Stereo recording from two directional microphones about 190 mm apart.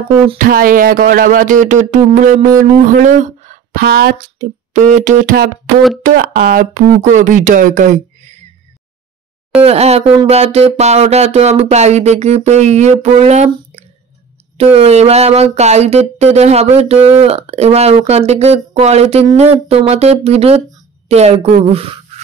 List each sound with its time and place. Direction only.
0.4 s speech: 50° right (ahead or behind)
9.6 s a woman's voice: 35° right (ahead or behind)